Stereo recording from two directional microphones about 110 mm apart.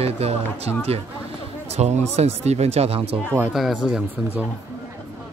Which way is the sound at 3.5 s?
5° right (ahead or behind).